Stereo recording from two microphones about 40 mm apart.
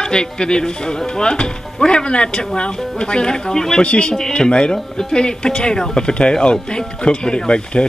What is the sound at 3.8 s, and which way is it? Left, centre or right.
Speech, left.